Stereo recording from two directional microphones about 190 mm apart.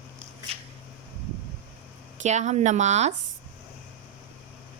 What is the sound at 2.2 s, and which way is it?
Speech, 40° right (ahead or behind).